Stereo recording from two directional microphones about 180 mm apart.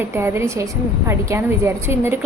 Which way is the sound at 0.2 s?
15° right (ahead or behind).